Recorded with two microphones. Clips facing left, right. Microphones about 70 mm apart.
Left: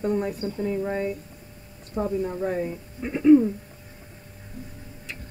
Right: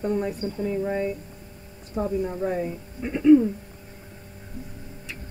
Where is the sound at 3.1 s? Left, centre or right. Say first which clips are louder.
Even; centre.